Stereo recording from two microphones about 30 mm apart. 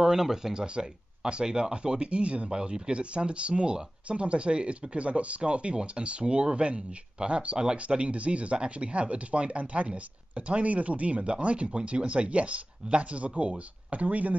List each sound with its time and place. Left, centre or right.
0.0 s speech: centre; by 14.3 s right